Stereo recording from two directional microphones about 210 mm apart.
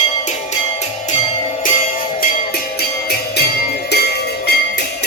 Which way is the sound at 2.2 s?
45° left (ahead or behind).